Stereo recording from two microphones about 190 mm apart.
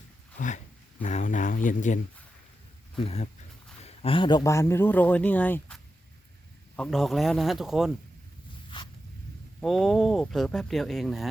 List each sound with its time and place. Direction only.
0.3 s speech: 40° left (ahead or behind)
3.0 s a man's voice: 30° left (ahead or behind); by 7.9 s centre (ahead or behind)
9.6 s speech: centre (ahead or behind)